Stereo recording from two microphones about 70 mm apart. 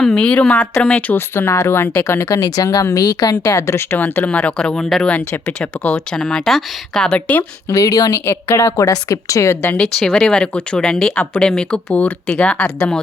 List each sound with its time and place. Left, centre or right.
0.0 s speech: centre
0.9 s speech: left
2.0 s a woman's voice: left
2.6 s a woman's voice: left
3.9 s speech: left
4.4 s speech: centre
7.7 s a woman's voice: left
8.2 s a woman's voice: left
9.8 s speech: centre